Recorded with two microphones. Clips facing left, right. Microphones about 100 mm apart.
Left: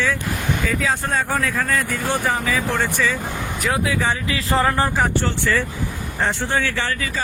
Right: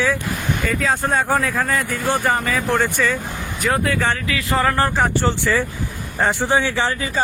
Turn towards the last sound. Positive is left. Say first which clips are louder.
# right 4 dB
turn(degrees=-20)  # may be behind; listen again after turning